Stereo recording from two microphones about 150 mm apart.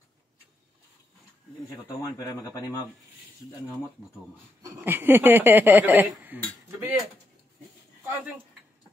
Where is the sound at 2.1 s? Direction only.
20° left (ahead or behind).